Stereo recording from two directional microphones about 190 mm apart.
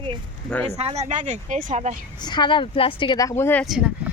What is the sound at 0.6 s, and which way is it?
Speech, 30° right (ahead or behind).